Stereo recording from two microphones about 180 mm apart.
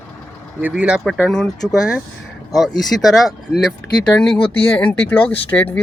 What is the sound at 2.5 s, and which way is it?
Speech, centre (ahead or behind).